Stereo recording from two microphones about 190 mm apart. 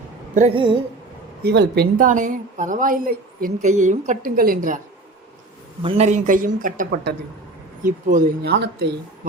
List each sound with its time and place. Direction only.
0.5 s a woman's voice: 25° right (ahead or behind)
1.4 s speech: 60° right (ahead or behind)
5.8 s speech: 35° right (ahead or behind)
8.5 s speech: 65° right (ahead or behind)